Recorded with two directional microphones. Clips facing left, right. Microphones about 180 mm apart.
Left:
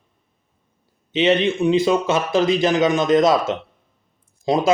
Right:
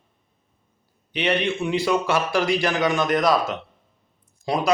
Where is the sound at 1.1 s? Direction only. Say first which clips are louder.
Left 6 dB; 20° left (ahead or behind).